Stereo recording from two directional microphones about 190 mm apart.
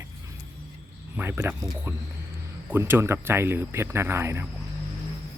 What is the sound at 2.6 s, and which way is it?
Speech, 10° right (ahead or behind).